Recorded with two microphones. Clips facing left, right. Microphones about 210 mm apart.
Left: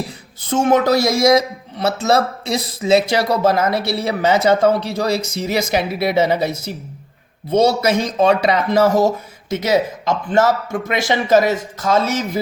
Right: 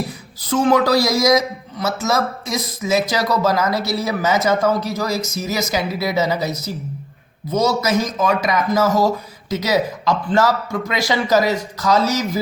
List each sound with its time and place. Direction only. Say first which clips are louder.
0.4 s speech: left 1 dB; 25° left (ahead or behind)